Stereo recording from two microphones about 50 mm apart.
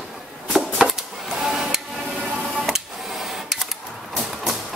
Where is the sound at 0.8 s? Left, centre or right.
Centre.